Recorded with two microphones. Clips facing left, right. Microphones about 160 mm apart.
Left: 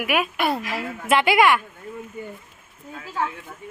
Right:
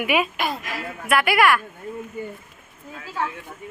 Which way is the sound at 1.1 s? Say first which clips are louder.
Left 1 dB; 25° left (ahead or behind).